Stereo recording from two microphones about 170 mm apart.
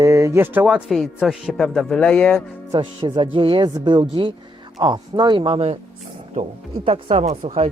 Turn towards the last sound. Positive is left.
turn(degrees=-35)  # may be behind; listen again after turning